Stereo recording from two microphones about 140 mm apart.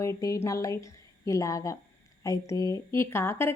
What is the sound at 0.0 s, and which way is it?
A woman's voice, 25° left (ahead or behind).